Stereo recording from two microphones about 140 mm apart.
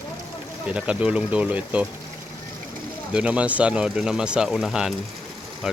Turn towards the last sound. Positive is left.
turn(degrees=-5)  # may be behind; listen again after turning